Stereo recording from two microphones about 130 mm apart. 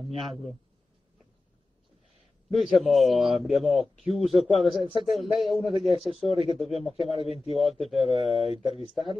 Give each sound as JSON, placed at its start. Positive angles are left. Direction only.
{"t": 0.1, "sound": "a man's voice", "side_deg": -40}
{"t": 2.5, "sound": "a man's voice", "side_deg": 0}
{"t": 8.6, "sound": "speech", "side_deg": 45}